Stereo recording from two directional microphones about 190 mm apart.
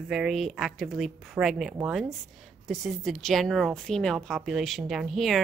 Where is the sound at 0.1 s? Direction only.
5° right (ahead or behind).